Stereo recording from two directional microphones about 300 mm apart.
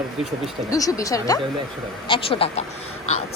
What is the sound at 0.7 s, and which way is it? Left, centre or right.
Speech, centre.